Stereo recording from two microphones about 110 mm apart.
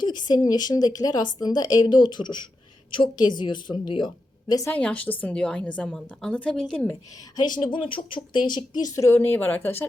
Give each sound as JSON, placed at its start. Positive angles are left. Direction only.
{"t": 0.0, "sound": "speech", "side_deg": 40}
{"t": 4.6, "sound": "speech", "side_deg": 10}
{"t": 7.3, "sound": "speech", "side_deg": 45}
{"t": 9.0, "sound": "speech", "side_deg": 20}